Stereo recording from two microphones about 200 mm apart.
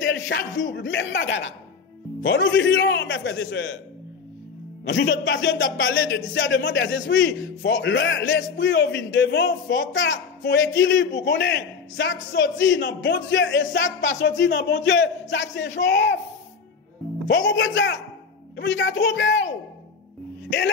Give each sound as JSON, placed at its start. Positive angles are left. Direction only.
{"t": 0.0, "sound": "speech", "side_deg": 65}
{"t": 4.8, "sound": "speech", "side_deg": 60}
{"t": 17.3, "sound": "speech", "side_deg": 65}